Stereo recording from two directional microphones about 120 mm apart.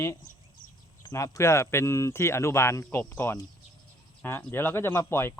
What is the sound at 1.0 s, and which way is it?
Speech, 30° left (ahead or behind).